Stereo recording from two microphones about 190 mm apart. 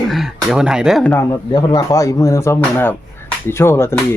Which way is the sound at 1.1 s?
20° left (ahead or behind).